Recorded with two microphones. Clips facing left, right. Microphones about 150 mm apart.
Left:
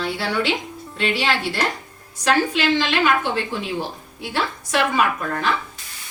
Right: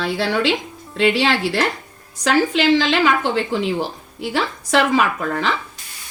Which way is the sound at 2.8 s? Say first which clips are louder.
Right 2 dB; 90° right.